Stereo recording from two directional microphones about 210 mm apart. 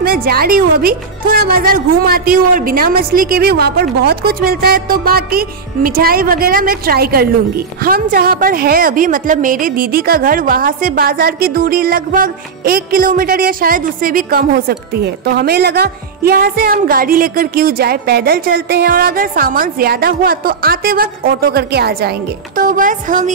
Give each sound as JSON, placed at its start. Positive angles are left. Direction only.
{"t": 0.0, "sound": "music", "side_deg": -45}
{"t": 22.6, "sound": "speech", "side_deg": -40}